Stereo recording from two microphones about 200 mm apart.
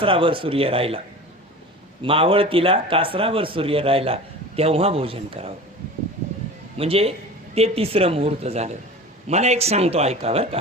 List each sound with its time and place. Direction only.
0.0 s a man's voice: 25° right (ahead or behind)
6.7 s a man's voice: 30° right (ahead or behind)